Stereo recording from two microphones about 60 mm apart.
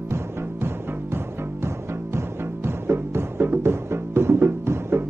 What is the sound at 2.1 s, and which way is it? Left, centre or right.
Music, right.